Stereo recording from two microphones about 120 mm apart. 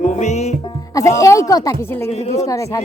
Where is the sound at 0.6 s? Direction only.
25° left (ahead or behind).